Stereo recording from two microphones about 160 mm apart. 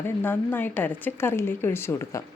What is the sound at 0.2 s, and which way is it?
Speech, 10° left (ahead or behind).